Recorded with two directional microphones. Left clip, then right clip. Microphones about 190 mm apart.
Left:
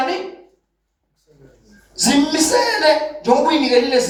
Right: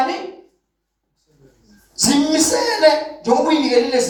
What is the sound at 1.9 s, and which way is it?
A woman's voice, 35° left (ahead or behind).